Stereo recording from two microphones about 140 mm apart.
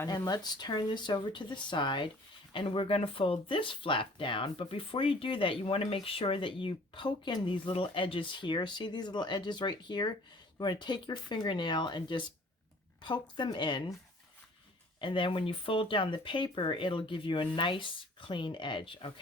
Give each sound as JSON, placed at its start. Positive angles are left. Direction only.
{"t": 0.1, "sound": "speech", "side_deg": 30}
{"t": 15.0, "sound": "speech", "side_deg": 35}